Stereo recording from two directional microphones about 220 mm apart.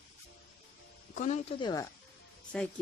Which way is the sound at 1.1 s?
30° left (ahead or behind).